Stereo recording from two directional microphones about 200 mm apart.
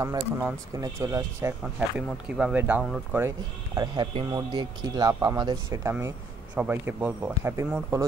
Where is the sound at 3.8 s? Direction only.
20° right (ahead or behind).